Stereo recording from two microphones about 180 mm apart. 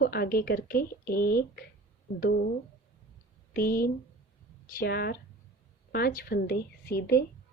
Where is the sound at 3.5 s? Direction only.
55° left (ahead or behind).